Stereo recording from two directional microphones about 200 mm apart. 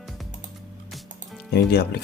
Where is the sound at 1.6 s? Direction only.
55° left (ahead or behind).